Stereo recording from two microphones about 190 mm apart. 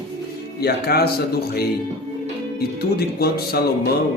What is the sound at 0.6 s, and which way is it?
Music, 55° left (ahead or behind).